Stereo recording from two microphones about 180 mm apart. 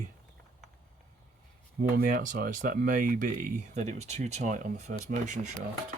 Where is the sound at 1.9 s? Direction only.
50° right (ahead or behind).